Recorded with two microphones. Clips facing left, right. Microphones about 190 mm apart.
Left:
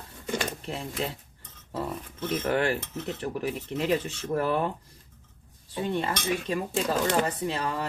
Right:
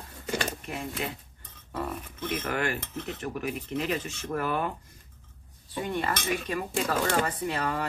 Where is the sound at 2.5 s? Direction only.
30° left (ahead or behind).